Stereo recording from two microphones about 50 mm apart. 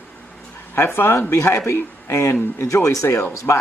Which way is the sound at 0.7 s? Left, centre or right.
Left.